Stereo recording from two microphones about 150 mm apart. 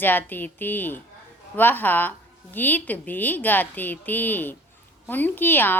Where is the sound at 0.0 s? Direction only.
10° left (ahead or behind).